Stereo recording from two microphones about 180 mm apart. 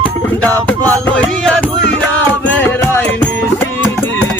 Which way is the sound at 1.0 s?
5° left (ahead or behind).